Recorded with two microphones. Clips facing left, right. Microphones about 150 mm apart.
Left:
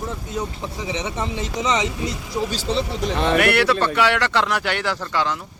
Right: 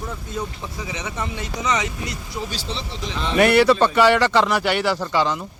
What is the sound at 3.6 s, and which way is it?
Speech, 15° right (ahead or behind).